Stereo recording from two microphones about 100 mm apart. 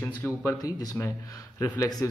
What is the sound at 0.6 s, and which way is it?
Speech, 40° left (ahead or behind).